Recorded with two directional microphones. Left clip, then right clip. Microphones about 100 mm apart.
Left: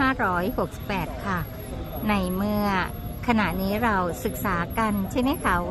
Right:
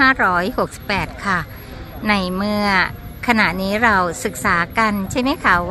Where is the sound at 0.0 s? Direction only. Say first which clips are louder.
Right 9 dB; 55° right (ahead or behind).